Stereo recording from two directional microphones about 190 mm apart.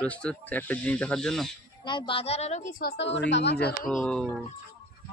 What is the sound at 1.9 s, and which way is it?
Speech, 25° left (ahead or behind).